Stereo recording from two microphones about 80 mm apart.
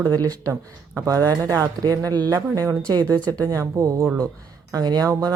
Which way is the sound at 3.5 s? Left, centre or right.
Right.